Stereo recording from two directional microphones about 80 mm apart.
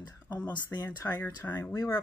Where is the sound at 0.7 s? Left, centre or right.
Left.